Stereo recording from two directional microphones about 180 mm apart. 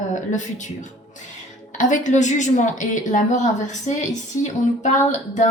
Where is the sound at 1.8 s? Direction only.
45° left (ahead or behind).